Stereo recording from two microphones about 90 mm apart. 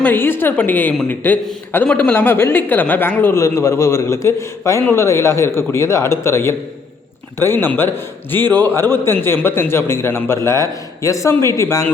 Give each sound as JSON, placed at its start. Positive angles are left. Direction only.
{"t": 0.0, "sound": "a man's voice", "side_deg": 20}